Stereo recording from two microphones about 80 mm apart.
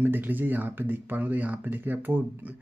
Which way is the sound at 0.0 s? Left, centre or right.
Right.